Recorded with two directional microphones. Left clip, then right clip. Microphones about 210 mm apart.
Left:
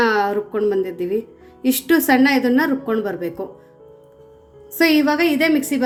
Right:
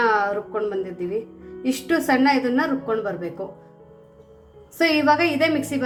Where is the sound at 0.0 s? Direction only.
35° left (ahead or behind).